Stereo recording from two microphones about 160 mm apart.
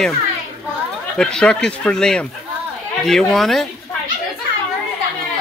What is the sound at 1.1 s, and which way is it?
Speech, 5° left (ahead or behind).